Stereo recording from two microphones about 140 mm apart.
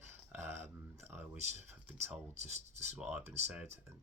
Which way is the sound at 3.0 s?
10° right (ahead or behind).